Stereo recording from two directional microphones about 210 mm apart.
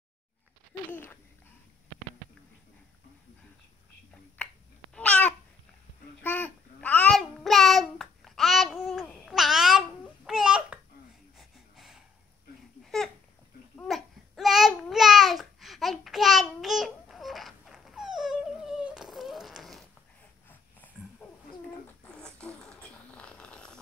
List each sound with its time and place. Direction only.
4.9 s babbling: 5° left (ahead or behind)
6.2 s child singing: 10° left (ahead or behind)
11.3 s gasp: centre (ahead or behind)
12.8 s babbling: centre (ahead or behind)
20.8 s wild animals: 10° left (ahead or behind)
21.2 s a sound: 5° left (ahead or behind)
22.0 s zipper: 5° left (ahead or behind)